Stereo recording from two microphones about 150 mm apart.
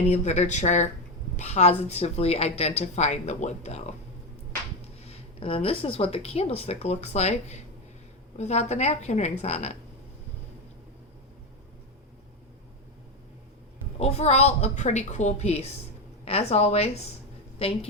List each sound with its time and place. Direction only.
0.1 s a woman's voice: 50° left (ahead or behind)
14.0 s a woman's voice: 45° left (ahead or behind)